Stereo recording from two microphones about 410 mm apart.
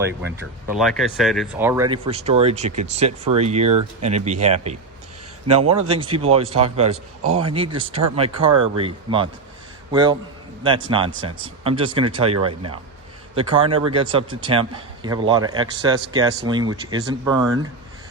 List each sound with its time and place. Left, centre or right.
0.7 s a man's voice: centre
13.3 s a man's voice: centre